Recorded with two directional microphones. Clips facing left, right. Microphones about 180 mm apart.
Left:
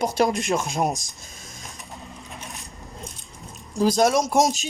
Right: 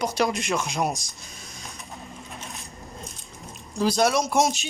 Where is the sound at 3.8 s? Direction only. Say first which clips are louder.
Left 3 dB; 45° left (ahead or behind).